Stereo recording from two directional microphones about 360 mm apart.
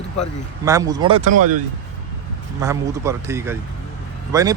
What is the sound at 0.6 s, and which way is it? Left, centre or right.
Speech, centre.